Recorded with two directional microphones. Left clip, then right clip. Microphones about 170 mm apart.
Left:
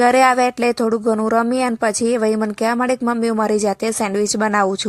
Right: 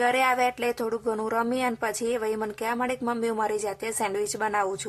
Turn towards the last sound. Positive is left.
turn(degrees=30)  # may be behind; listen again after turning